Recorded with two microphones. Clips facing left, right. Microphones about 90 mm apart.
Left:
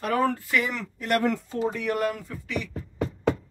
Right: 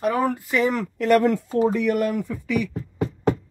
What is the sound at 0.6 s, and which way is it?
Speech, 40° right (ahead or behind).